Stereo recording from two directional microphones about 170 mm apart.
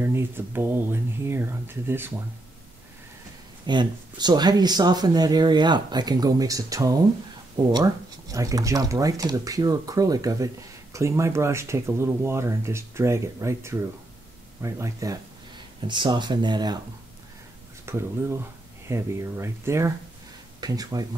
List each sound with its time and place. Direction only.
0.0 s speech: 15° right (ahead or behind)
3.6 s speech: 25° right (ahead or behind)
17.8 s speech: 15° right (ahead or behind)